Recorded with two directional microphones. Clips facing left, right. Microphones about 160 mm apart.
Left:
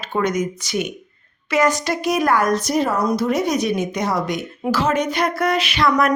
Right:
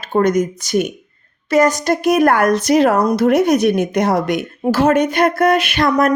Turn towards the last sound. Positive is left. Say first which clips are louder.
# right 3 dB
turn(degrees=-45)  # may be behind; listen again after turning